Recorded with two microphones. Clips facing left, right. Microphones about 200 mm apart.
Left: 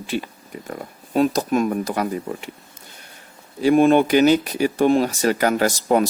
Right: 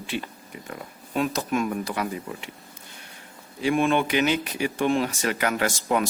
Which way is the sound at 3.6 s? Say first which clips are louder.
Left 8 dB; 40° left (ahead or behind).